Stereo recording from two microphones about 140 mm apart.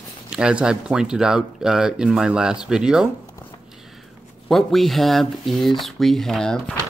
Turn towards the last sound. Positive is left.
turn(degrees=5)  # may be behind; listen again after turning